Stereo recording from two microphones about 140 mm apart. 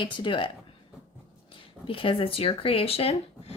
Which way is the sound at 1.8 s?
40° left (ahead or behind).